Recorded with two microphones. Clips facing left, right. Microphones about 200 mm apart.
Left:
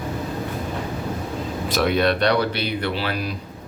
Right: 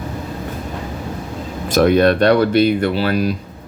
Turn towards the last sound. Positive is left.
turn(degrees=-40)  # may be behind; listen again after turning